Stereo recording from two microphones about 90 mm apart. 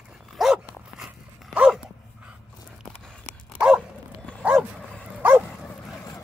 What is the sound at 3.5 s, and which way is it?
Dog, 10° right (ahead or behind).